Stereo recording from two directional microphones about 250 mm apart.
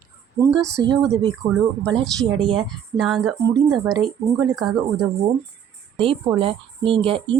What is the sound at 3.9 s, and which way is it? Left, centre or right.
Speech, centre.